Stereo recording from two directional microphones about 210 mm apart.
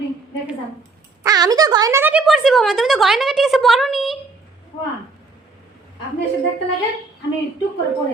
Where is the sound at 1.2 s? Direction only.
15° right (ahead or behind); by 4.2 s centre (ahead or behind).